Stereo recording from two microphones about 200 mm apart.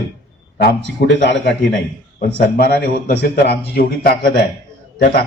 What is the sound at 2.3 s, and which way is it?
A man's voice, 50° left (ahead or behind).